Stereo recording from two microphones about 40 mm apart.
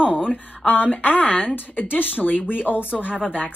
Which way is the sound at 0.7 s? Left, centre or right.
Left.